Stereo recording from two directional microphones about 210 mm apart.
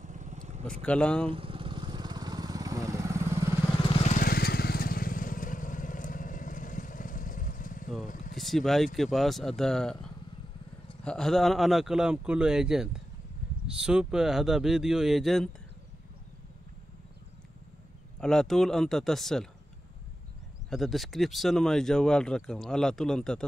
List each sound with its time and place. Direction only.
0.0 s vehicle: 35° right (ahead or behind)
0.8 s speech: 5° left (ahead or behind)
1.3 s motorcycle: 25° right (ahead or behind)
4.0 s vehicle: 40° left (ahead or behind)
8.4 s speech: centre (ahead or behind)
18.2 s speech: 5° left (ahead or behind)
20.7 s speech: centre (ahead or behind)